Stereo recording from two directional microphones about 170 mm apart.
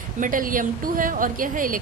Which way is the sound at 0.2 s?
50° right (ahead or behind).